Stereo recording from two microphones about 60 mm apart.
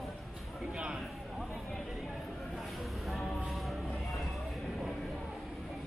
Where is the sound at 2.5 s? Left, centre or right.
Centre.